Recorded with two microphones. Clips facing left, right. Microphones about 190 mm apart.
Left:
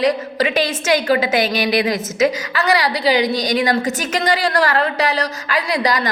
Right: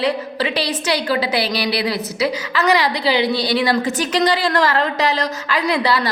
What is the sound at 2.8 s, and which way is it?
A woman's voice, 40° left (ahead or behind).